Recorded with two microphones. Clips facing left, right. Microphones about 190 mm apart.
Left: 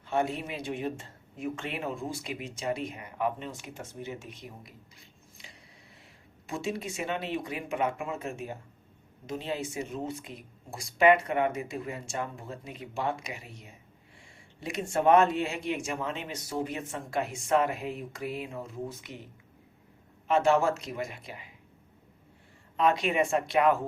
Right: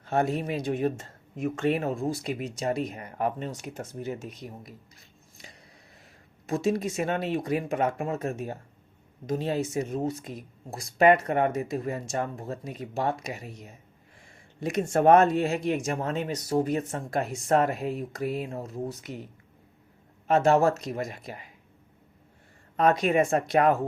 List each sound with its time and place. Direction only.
0.0 s speech: 40° right (ahead or behind)
6.5 s speech: 40° right (ahead or behind)
20.2 s speech: 40° right (ahead or behind)
22.8 s speech: 45° right (ahead or behind)